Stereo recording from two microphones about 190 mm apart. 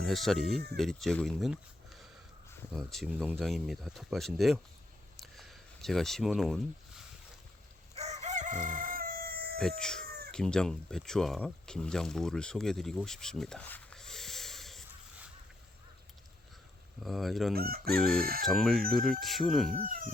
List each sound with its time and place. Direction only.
0.0 s speech: centre (ahead or behind)
2.7 s speech: centre (ahead or behind)
5.2 s a sound: centre (ahead or behind)
7.9 s crowing: 35° right (ahead or behind); by 9.6 s 50° right (ahead or behind)
9.6 s speech: 5° left (ahead or behind)
10.1 s chicken: 55° right (ahead or behind)
10.3 s speech: 5° left (ahead or behind)
17.0 s speech: centre (ahead or behind)
17.5 s chicken: 55° right (ahead or behind)
18.4 s speech: centre (ahead or behind)
19.7 s chicken: 45° right (ahead or behind)